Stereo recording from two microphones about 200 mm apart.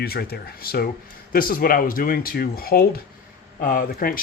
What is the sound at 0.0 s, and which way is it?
Speech, 50° left (ahead or behind).